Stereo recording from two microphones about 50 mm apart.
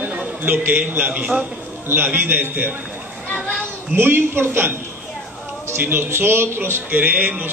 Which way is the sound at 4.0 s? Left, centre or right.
Right.